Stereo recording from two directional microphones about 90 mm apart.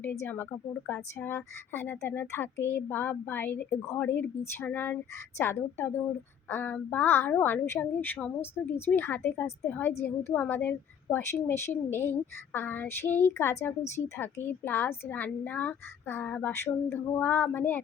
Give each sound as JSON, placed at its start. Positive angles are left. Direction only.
{"t": 0.0, "sound": "a woman's voice", "side_deg": 25}